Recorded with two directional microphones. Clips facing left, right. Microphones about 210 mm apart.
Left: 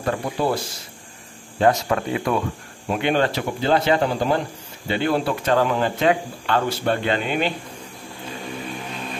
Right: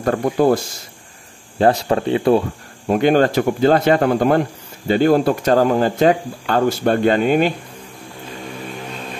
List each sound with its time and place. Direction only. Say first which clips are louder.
0.0 s speech: right 7 dB; 45° right (ahead or behind)
1.6 s speech: right 3 dB; 35° right (ahead or behind)
2.9 s speech: right 7 dB; 45° right (ahead or behind)
4.8 s speech: right 7 dB; 45° right (ahead or behind)